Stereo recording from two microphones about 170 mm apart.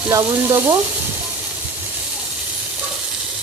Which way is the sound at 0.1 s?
20° right (ahead or behind).